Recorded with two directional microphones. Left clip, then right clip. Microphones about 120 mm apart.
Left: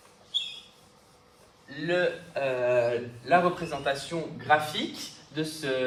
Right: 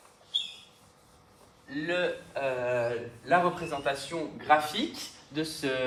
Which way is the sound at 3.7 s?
45° right (ahead or behind).